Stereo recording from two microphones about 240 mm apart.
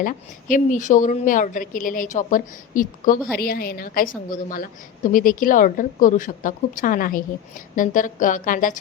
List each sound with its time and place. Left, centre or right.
0.0 s a woman's voice: left